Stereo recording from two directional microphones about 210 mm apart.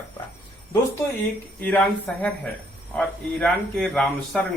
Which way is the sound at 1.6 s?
5° left (ahead or behind).